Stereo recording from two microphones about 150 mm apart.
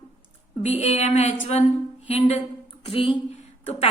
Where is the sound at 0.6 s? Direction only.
45° left (ahead or behind).